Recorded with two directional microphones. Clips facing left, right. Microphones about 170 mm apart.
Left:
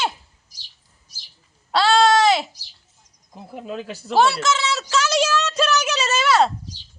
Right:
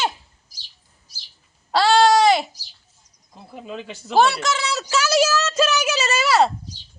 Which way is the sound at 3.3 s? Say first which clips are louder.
Left 3 dB; 5° left (ahead or behind).